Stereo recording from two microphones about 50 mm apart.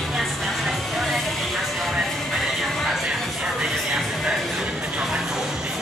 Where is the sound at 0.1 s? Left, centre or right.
Centre.